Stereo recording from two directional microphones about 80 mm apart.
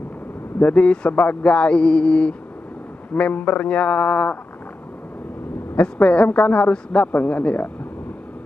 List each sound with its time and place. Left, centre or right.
0.6 s a woman's voice: centre
5.8 s a woman's voice: centre